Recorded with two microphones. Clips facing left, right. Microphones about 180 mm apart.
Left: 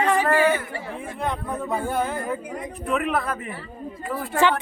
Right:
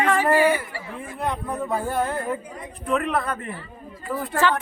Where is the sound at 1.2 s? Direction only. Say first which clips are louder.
Right 1 dB; centre (ahead or behind).